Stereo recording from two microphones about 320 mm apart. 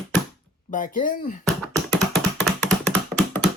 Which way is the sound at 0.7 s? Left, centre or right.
Left.